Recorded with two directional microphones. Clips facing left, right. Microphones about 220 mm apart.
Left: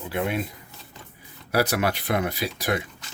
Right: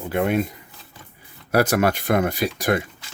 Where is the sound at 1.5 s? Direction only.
50° right (ahead or behind).